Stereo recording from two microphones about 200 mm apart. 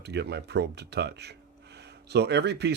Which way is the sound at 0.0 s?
55° right (ahead or behind).